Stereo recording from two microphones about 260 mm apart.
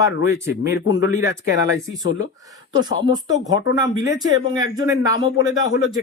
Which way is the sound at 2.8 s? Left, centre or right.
Centre.